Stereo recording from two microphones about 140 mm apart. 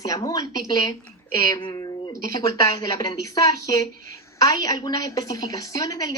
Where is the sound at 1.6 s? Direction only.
30° left (ahead or behind).